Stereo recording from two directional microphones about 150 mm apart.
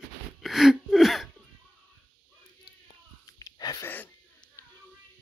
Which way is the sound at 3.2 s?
25° left (ahead or behind).